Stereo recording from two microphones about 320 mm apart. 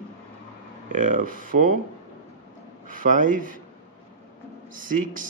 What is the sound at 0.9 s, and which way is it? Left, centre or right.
Speech, right.